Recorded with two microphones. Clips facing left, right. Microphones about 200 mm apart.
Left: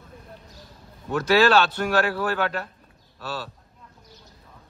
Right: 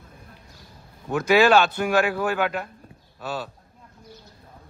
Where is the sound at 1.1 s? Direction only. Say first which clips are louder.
Right 1 dB; 10° right (ahead or behind).